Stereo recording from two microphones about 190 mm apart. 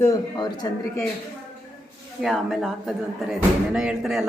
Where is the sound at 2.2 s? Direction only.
Centre (ahead or behind).